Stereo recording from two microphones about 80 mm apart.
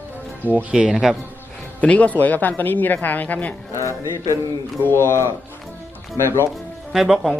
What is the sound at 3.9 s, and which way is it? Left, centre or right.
Music, right.